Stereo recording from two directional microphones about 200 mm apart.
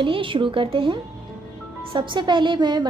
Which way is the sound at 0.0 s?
25° right (ahead or behind).